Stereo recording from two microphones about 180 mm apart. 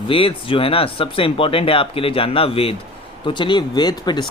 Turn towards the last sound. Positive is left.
turn(degrees=25)  # may be behind; listen again after turning